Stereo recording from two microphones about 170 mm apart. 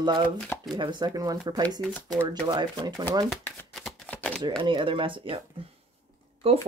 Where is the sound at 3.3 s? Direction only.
10° left (ahead or behind).